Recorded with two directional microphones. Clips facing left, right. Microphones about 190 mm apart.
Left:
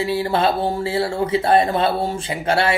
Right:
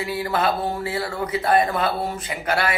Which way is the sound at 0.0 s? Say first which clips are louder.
Left 4 dB; 30° left (ahead or behind).